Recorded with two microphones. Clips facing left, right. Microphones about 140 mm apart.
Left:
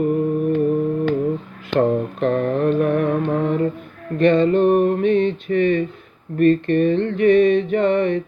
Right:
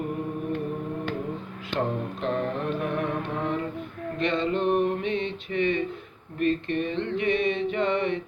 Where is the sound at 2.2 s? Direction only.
55° left (ahead or behind).